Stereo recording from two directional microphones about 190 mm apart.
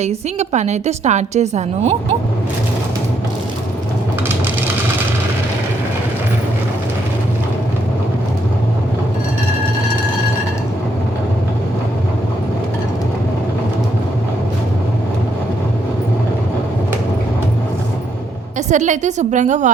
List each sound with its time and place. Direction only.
0.0 s a woman's voice: 35° right (ahead or behind)
18.7 s a woman's voice: 40° right (ahead or behind)